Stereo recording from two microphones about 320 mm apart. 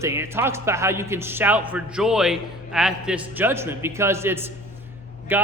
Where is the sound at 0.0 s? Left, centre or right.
Centre.